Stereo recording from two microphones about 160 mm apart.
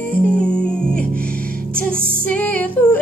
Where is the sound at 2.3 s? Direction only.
10° left (ahead or behind).